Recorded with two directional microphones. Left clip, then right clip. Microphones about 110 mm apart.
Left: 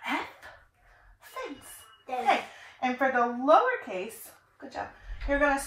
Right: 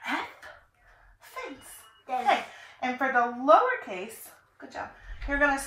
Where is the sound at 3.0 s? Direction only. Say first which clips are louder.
Right 1 dB; 10° left (ahead or behind).